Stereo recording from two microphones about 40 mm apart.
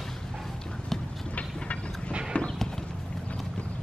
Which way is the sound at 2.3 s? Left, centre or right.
Left.